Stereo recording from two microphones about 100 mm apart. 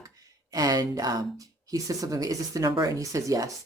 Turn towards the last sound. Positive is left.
turn(degrees=-35)  # may be behind; listen again after turning